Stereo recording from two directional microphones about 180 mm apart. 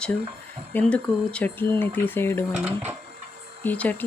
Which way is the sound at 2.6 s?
10° right (ahead or behind).